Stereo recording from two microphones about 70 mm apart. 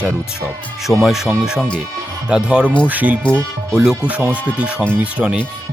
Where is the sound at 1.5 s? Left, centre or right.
Centre.